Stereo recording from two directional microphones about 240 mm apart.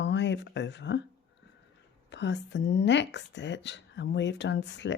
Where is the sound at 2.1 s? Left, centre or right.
Left.